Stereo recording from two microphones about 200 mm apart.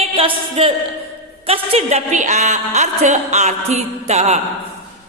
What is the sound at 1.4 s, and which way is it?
A woman's voice, 30° right (ahead or behind).